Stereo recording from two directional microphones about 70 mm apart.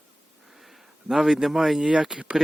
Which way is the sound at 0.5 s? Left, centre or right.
Centre.